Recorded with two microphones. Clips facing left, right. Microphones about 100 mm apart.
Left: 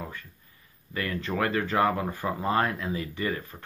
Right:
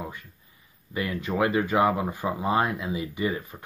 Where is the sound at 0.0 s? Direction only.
15° right (ahead or behind).